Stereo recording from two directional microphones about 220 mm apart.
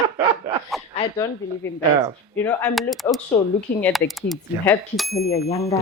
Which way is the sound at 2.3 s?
10° left (ahead or behind).